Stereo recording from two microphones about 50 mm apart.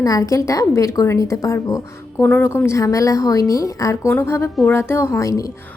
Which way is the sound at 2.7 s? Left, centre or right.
Left.